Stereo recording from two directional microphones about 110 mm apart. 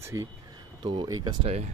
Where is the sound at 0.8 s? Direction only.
40° right (ahead or behind).